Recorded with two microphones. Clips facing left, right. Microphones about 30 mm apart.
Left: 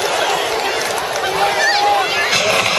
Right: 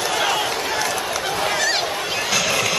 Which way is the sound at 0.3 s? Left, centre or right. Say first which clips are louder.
Left 3 dB; centre.